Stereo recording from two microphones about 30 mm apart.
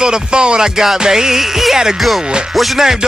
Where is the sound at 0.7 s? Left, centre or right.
Centre.